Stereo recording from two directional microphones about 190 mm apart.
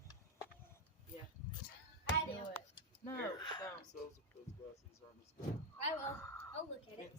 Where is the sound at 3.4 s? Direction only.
20° left (ahead or behind).